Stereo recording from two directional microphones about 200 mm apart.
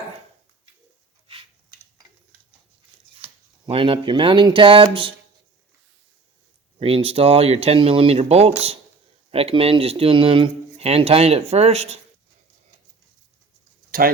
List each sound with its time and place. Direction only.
3.7 s speech: 25° right (ahead or behind)
6.7 s speech: 30° right (ahead or behind)